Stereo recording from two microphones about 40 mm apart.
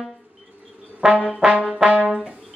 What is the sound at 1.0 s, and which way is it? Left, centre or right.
Brass instrument, right.